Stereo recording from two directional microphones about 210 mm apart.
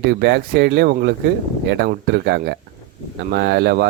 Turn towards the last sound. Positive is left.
turn(degrees=-50)  # may be behind; listen again after turning